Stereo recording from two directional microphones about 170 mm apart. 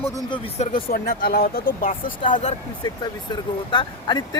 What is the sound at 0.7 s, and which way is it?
Speech, 60° left (ahead or behind).